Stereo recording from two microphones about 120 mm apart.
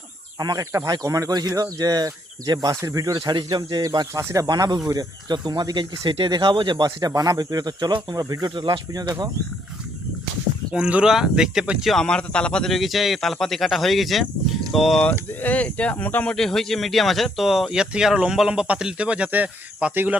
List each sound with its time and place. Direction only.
0.3 s speech: 30° right (ahead or behind)
10.8 s speech: 10° right (ahead or behind)
15.3 s speech: 15° left (ahead or behind); by 20.1 s 15° right (ahead or behind)